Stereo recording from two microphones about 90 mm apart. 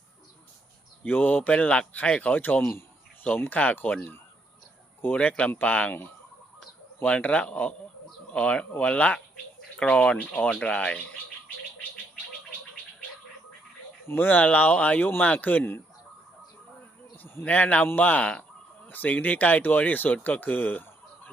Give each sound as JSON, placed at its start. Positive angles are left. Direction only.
{"t": 1.0, "sound": "speech", "side_deg": 20}
{"t": 14.1, "sound": "speech", "side_deg": 20}
{"t": 17.4, "sound": "speech", "side_deg": 15}